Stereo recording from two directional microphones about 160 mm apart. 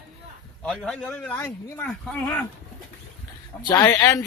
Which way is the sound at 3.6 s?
20° left (ahead or behind).